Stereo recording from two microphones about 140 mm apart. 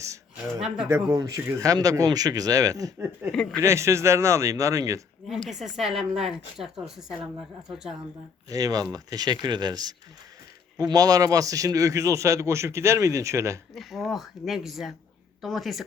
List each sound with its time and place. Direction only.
0.9 s a man's voice: 20° right (ahead or behind)
3.0 s speech: 15° right (ahead or behind)
3.3 s speech: 5° left (ahead or behind)
3.6 s a man's voice: 20° right (ahead or behind)
5.3 s speech: centre (ahead or behind)
8.4 s a man's voice: 25° right (ahead or behind)
13.7 s speech: centre (ahead or behind)